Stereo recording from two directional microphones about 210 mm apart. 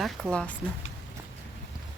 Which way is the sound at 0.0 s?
Centre (ahead or behind).